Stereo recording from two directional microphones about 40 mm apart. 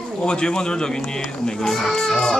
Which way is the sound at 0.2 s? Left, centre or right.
Left.